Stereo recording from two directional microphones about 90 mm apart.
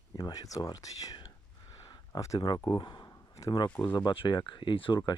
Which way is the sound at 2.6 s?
60° left (ahead or behind).